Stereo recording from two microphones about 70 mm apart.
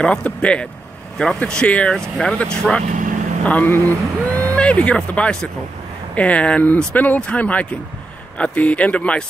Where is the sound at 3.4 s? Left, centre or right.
Left.